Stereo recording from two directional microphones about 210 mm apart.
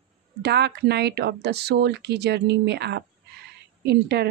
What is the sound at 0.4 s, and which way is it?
Speech, 50° right (ahead or behind).